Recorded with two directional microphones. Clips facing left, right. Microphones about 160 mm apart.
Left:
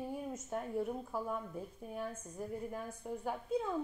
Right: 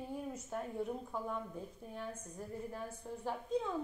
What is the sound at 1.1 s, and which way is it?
Speech, 5° left (ahead or behind).